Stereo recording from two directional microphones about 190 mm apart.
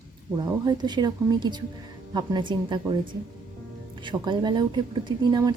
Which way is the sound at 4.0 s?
25° right (ahead or behind).